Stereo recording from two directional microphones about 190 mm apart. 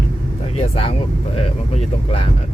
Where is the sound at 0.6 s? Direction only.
30° left (ahead or behind).